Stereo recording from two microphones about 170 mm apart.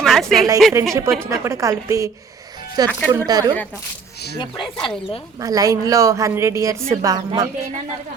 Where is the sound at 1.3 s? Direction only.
20° right (ahead or behind).